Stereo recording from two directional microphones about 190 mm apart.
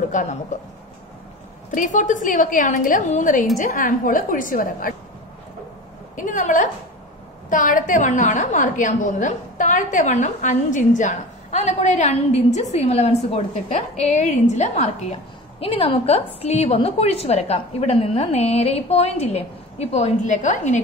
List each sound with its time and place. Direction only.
0.1 s a woman's voice: 40° left (ahead or behind)
1.7 s a woman's voice: 40° left (ahead or behind)
6.1 s a woman's voice: 40° left (ahead or behind)